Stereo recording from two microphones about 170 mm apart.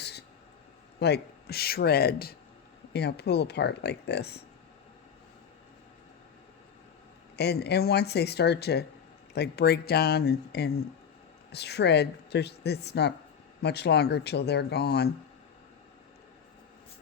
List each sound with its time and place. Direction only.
0.0 s a sound: 75° left (ahead or behind)
0.9 s speech: 75° left (ahead or behind)
7.3 s speech: 75° left (ahead or behind)